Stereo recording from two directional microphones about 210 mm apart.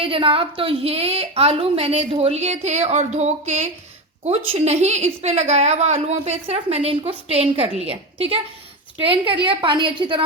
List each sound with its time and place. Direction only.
0.0 s a woman's voice: 25° right (ahead or behind)